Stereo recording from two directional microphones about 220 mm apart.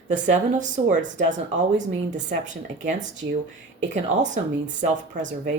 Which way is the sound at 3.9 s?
35° right (ahead or behind).